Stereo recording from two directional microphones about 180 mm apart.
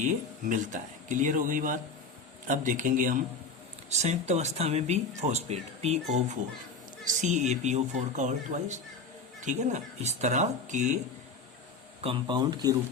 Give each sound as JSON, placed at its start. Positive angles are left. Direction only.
{"t": 0.0, "sound": "speech", "side_deg": -45}
{"t": 12.0, "sound": "speech", "side_deg": -30}